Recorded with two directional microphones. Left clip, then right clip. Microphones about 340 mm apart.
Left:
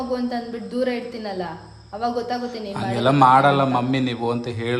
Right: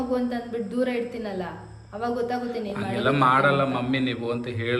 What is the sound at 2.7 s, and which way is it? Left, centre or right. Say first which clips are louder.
A man's voice: left 5 dB; centre.